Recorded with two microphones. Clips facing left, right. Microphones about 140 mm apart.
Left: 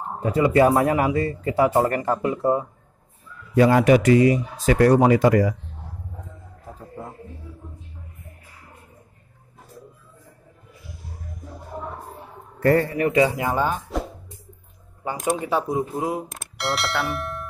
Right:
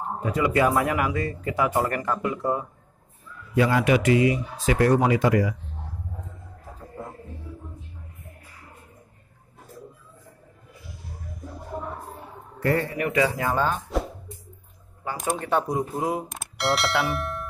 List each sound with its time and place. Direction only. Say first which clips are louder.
0.2 s speech: left 5 dB; 30° left (ahead or behind)
3.5 s speech: left 5 dB; 40° left (ahead or behind)
12.6 s speech: left 5 dB; 40° left (ahead or behind)
13.2 s speech: left 1 dB; 15° left (ahead or behind)
15.3 s speech: right 1 dB; 5° left (ahead or behind)